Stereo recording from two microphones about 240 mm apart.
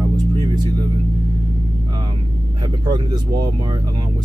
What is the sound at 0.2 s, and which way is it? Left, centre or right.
Music, centre.